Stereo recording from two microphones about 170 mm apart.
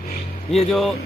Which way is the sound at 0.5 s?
Centre (ahead or behind).